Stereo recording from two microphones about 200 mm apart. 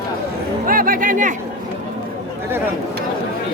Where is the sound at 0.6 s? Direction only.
45° right (ahead or behind).